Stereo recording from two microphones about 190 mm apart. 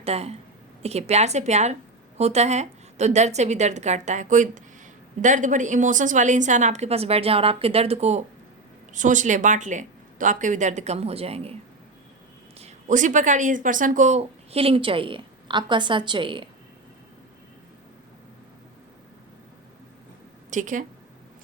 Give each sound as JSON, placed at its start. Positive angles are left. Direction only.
{"t": 0.0, "sound": "speech", "side_deg": -35}
{"t": 12.5, "sound": "speech", "side_deg": -40}
{"t": 20.5, "sound": "speech", "side_deg": -40}